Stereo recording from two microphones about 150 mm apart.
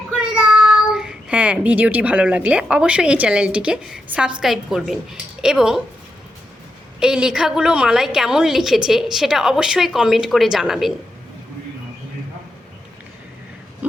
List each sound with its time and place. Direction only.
0.1 s a child's voice: 5° right (ahead or behind)
7.0 s a woman's voice: 5° right (ahead or behind)